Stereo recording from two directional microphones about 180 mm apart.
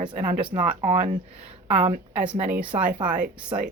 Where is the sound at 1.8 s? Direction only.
10° right (ahead or behind).